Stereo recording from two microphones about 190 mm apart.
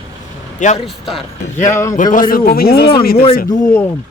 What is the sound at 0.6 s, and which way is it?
Speech, 40° left (ahead or behind).